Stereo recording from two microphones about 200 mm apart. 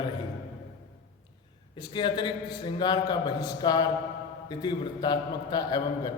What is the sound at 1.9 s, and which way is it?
A man's voice, 25° left (ahead or behind).